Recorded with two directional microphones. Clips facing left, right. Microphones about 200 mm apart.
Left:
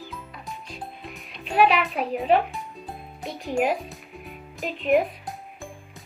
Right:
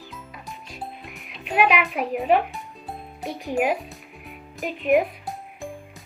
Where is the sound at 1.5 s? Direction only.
15° right (ahead or behind).